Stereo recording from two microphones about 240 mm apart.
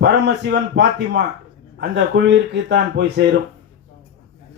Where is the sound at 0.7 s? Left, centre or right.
Right.